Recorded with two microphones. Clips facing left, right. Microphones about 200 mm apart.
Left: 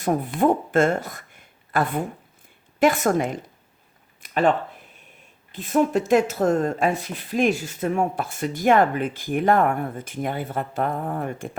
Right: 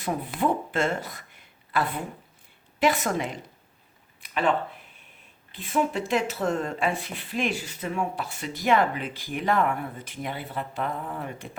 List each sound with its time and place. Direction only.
0.0 s a woman's voice: 50° left (ahead or behind)
4.2 s a sound: 45° left (ahead or behind)
5.5 s speech: 45° left (ahead or behind)